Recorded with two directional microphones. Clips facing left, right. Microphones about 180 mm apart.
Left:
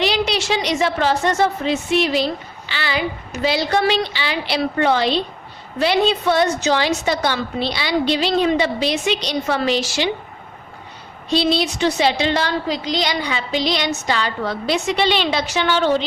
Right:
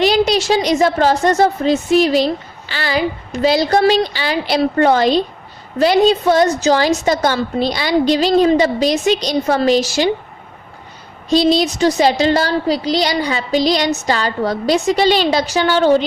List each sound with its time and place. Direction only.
0.0 s a woman's voice: 45° right (ahead or behind)
11.3 s a woman's voice: 45° right (ahead or behind)